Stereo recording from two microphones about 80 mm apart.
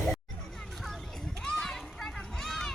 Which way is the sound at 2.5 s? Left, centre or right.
Centre.